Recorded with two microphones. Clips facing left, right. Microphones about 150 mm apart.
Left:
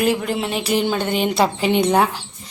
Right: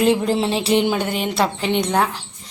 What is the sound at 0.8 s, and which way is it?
Speech, 10° right (ahead or behind).